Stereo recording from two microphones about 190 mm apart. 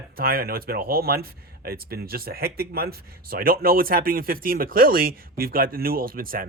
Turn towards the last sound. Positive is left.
turn(degrees=-50)  # may be behind; listen again after turning